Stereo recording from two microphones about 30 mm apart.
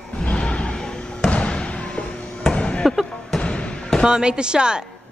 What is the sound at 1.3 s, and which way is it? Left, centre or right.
Basketball bounce, left.